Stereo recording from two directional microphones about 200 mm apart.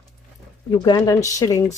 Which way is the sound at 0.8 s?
20° left (ahead or behind).